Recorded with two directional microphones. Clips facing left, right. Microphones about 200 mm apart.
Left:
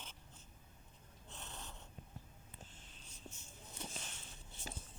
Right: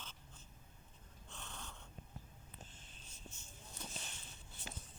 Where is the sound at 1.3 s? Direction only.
20° left (ahead or behind).